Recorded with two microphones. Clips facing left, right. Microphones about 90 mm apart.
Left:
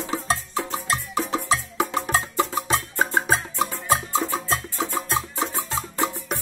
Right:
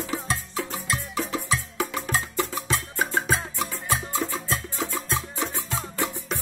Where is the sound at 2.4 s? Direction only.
35° left (ahead or behind).